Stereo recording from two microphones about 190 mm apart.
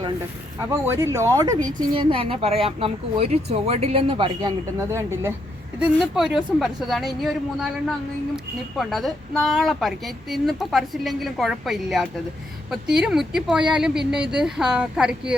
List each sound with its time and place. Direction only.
0.9 s speech: 15° right (ahead or behind)
5.8 s speech: 5° right (ahead or behind)